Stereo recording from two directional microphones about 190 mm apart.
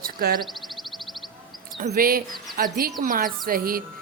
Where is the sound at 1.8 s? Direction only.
50° right (ahead or behind).